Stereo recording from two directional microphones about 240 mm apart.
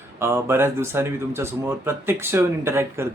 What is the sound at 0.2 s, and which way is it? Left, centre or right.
Speech, centre.